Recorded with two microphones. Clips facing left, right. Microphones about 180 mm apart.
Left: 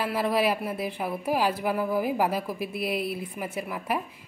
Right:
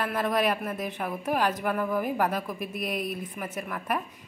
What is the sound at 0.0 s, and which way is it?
Speech, 5° left (ahead or behind).